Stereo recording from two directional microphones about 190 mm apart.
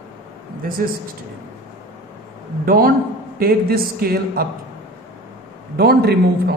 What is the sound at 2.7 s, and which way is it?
A man's voice, 50° right (ahead or behind).